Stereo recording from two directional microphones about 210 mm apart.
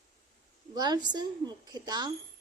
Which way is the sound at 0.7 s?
20° right (ahead or behind).